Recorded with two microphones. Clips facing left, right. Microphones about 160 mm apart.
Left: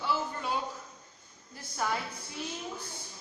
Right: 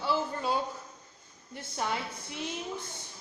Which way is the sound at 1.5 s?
25° right (ahead or behind).